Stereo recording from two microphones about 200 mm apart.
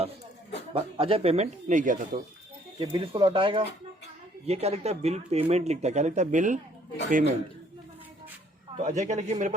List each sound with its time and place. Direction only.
0.7 s speech: 30° right (ahead or behind)
2.7 s speech: 30° right (ahead or behind)
8.8 s speech: 40° right (ahead or behind)